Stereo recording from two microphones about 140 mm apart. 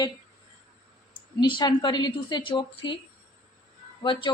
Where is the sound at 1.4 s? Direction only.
30° left (ahead or behind).